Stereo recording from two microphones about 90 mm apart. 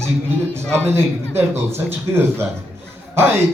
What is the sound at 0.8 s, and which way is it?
A man's voice, 25° right (ahead or behind).